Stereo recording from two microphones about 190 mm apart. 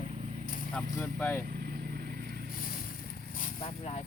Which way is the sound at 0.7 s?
5° left (ahead or behind).